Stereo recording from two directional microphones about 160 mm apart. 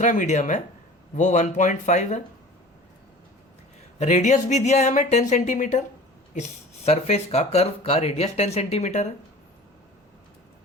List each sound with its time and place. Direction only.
0.0 s speech: 50° left (ahead or behind)
3.9 s speech: 45° left (ahead or behind)